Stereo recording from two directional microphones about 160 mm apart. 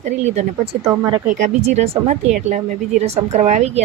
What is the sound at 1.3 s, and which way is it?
A woman's voice, 55° right (ahead or behind).